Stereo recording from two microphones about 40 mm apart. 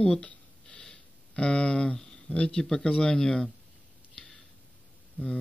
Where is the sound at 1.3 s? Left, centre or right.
Left.